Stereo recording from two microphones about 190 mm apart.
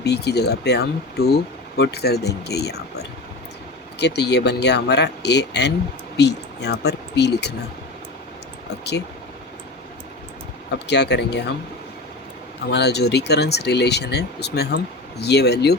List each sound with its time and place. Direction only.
0.0 s speech: 60° left (ahead or behind)
8.8 s speech: 60° left (ahead or behind)
10.8 s speech: 65° left (ahead or behind)
12.7 s speech: 60° left (ahead or behind)